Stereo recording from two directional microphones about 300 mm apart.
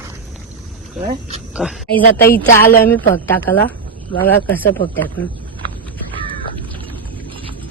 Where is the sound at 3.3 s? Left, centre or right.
Left.